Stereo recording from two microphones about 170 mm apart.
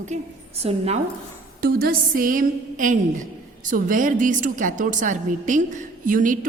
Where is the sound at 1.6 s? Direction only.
60° right (ahead or behind).